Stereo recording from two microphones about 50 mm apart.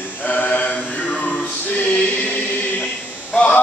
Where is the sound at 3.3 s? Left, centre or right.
Left.